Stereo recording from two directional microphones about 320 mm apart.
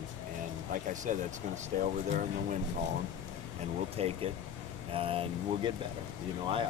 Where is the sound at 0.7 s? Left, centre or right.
Right.